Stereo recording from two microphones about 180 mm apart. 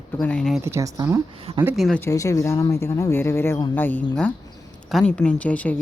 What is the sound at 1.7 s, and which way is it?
Speech, centre (ahead or behind).